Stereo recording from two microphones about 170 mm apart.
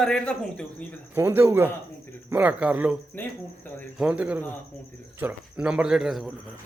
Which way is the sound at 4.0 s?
5° right (ahead or behind).